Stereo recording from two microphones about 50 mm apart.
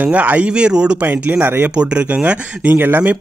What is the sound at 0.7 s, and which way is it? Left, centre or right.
Speech, centre.